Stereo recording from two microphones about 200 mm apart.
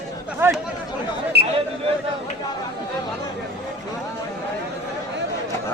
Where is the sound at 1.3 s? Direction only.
55° right (ahead or behind).